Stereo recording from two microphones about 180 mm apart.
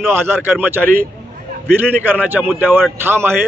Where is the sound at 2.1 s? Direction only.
10° right (ahead or behind).